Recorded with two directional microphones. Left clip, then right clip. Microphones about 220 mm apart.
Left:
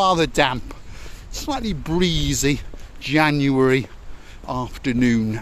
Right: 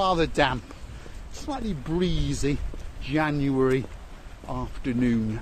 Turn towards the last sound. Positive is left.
turn(degrees=45)  # may be behind; listen again after turning